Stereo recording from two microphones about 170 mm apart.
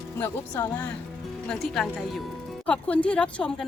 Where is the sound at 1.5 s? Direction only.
Centre (ahead or behind).